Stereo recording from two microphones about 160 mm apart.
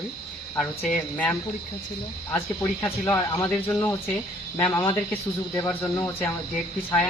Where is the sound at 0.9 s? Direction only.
10° left (ahead or behind).